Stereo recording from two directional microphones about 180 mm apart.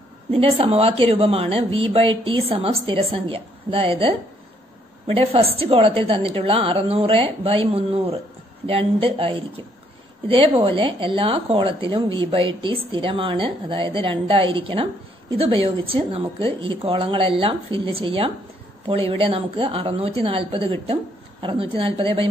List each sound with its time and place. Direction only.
0.3 s a woman's voice: 30° right (ahead or behind)